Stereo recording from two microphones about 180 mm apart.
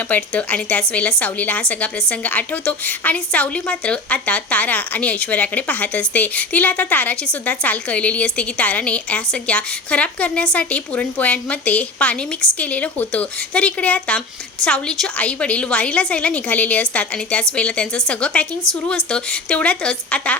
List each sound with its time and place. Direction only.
0.1 s a woman's voice: 5° left (ahead or behind)